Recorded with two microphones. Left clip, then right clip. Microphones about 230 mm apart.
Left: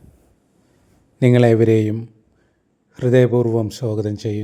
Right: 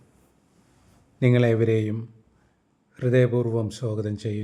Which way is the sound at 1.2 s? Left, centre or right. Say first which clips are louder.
Left 7 dB; left.